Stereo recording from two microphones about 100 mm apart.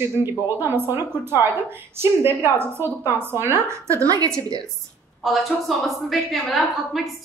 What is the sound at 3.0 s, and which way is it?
A woman's voice, 25° right (ahead or behind).